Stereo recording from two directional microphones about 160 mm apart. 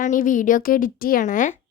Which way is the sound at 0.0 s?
55° left (ahead or behind).